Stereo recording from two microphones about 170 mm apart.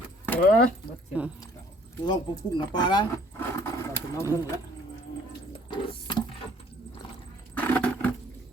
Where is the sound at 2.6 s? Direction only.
25° left (ahead or behind).